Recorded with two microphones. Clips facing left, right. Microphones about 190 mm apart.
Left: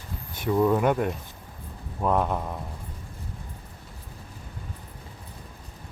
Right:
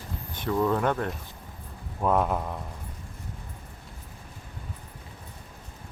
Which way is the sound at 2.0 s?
Centre (ahead or behind).